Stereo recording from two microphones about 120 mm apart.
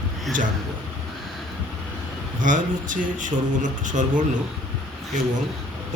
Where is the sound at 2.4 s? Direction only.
90° right.